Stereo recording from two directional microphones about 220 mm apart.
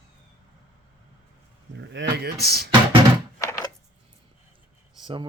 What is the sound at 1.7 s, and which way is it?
Speech, 55° right (ahead or behind).